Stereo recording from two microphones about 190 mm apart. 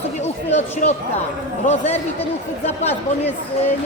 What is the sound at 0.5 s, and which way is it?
Speech, 35° left (ahead or behind).